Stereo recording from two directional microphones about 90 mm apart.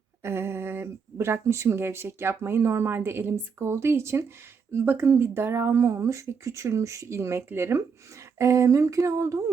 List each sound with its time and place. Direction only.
0.2 s speech: 30° right (ahead or behind)